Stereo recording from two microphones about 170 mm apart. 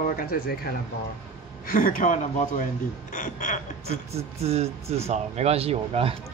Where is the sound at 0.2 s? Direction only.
60° left (ahead or behind).